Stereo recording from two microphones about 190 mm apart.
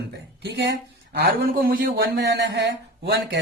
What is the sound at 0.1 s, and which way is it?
A man's voice, 60° right (ahead or behind).